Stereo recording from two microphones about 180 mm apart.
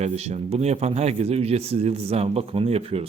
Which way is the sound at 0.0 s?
35° right (ahead or behind).